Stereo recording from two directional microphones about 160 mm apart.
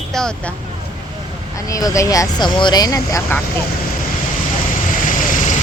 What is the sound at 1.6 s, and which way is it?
Speech, 20° left (ahead or behind).